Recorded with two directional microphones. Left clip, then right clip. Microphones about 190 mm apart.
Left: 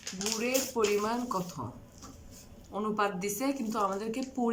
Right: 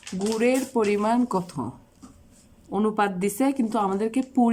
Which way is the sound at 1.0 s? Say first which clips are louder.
Right 8 dB; 50° right (ahead or behind).